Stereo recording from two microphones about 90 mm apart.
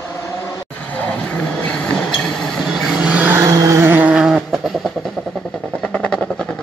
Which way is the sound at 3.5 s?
35° right (ahead or behind).